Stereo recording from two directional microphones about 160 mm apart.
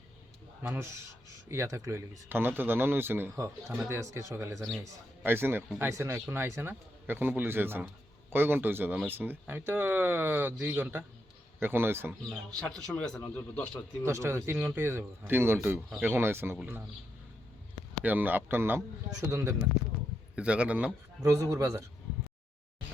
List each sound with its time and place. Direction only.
0.7 s speech: 15° right (ahead or behind)
12.3 s a man's voice: 5° left (ahead or behind)
14.0 s speech: 15° right (ahead or behind)
18.0 s speech: 10° right (ahead or behind)
21.2 s a man's voice: 20° right (ahead or behind)